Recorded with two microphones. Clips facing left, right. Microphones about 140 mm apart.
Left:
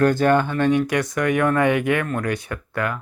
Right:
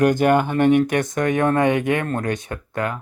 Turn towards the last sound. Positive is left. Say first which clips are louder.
# even
turn(degrees=-25)  # may be behind; listen again after turning